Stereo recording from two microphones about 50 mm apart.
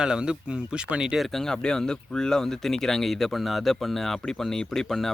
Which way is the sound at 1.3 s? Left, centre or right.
Centre.